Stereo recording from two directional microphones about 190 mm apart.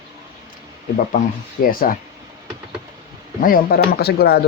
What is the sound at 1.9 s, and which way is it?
Speech, 50° left (ahead or behind).